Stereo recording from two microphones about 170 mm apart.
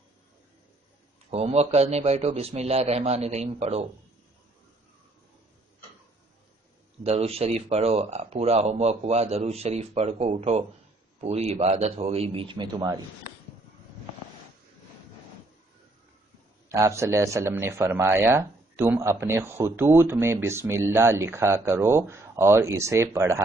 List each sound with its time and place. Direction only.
1.3 s speech: 35° right (ahead or behind)
7.0 s speech: 35° right (ahead or behind)
16.6 s speech: 15° right (ahead or behind)